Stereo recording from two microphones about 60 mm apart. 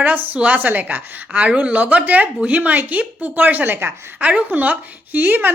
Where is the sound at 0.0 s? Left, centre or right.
Right.